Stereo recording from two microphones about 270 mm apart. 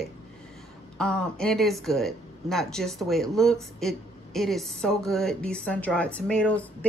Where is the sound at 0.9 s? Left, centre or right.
Centre.